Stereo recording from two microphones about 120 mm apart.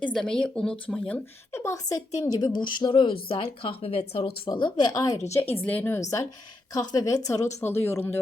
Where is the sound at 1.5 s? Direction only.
25° left (ahead or behind); by 4.5 s 55° left (ahead or behind).